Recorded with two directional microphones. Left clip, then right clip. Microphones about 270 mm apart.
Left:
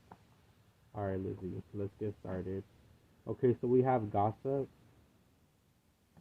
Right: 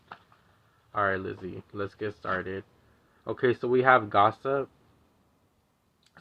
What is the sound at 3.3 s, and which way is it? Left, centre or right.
Speech, right.